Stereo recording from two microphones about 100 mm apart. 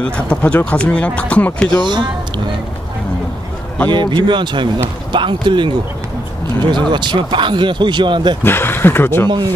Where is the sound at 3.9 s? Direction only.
50° right (ahead or behind).